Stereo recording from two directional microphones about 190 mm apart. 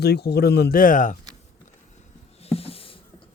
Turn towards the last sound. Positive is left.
turn(degrees=30)  # may be behind; listen again after turning